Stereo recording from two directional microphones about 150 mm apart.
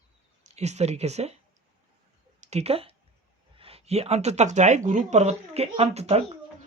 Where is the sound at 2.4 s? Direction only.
45° right (ahead or behind).